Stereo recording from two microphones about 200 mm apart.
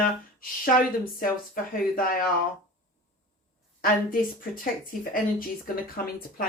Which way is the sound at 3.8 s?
45° left (ahead or behind).